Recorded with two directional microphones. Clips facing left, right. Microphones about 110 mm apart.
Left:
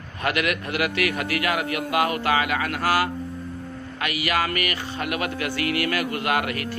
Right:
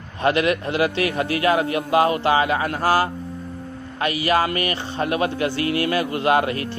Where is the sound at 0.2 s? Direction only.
30° right (ahead or behind).